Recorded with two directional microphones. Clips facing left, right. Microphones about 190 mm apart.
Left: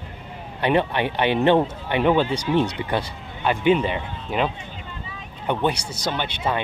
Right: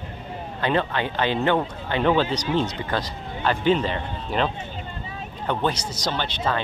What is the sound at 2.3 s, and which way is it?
Speech, 30° left (ahead or behind).